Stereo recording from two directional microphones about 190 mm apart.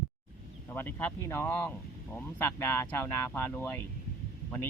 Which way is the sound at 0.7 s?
10° left (ahead or behind).